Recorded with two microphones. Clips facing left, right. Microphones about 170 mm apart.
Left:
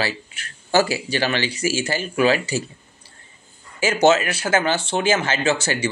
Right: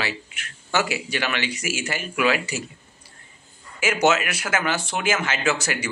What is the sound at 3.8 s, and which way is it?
Speech, 30° left (ahead or behind).